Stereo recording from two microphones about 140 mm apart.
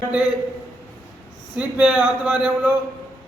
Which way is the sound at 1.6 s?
10° right (ahead or behind).